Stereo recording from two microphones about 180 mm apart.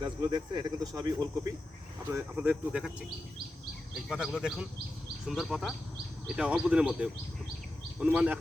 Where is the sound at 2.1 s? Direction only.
10° right (ahead or behind).